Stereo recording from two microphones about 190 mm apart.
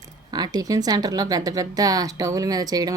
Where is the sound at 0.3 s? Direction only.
20° right (ahead or behind).